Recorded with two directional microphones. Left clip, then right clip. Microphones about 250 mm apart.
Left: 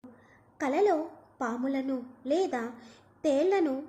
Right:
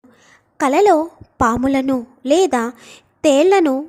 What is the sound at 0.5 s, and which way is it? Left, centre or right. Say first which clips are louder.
A woman's voice: right 14 dB; right.